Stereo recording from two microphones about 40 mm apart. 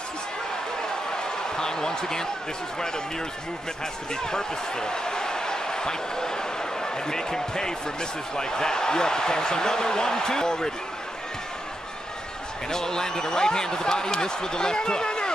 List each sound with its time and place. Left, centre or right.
1.6 s speech: centre
4.1 s speech: centre
12.6 s speech: centre